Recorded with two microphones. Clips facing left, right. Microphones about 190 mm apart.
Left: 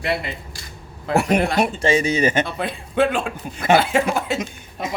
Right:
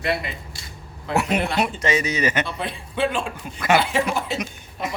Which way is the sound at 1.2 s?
45° left (ahead or behind).